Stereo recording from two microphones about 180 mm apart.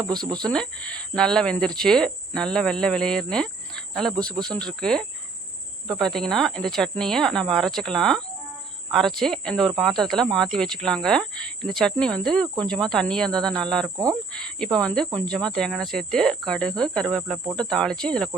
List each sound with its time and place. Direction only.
0.0 s speech: 20° right (ahead or behind)
0.4 s speech: 5° left (ahead or behind)
13.9 s speech: 20° right (ahead or behind)
14.3 s speech: 5° left (ahead or behind)